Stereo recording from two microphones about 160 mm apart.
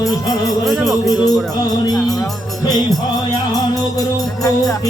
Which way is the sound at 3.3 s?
25° left (ahead or behind).